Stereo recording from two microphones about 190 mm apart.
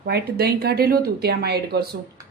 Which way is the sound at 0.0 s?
55° right (ahead or behind).